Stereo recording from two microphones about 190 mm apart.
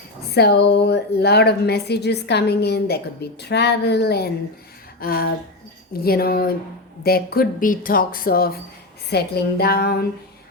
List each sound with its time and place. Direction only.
0.3 s a woman's voice: 60° left (ahead or behind)
4.9 s a sound: 50° left (ahead or behind)
5.9 s a woman's voice: 55° left (ahead or behind)